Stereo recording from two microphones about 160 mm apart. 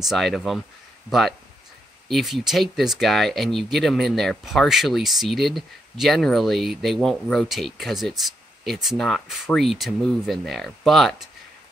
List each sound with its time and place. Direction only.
0.0 s speech: centre (ahead or behind)
2.0 s speech: centre (ahead or behind)